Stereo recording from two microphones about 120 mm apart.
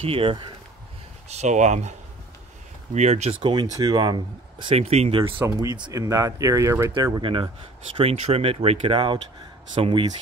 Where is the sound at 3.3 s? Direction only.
40° right (ahead or behind).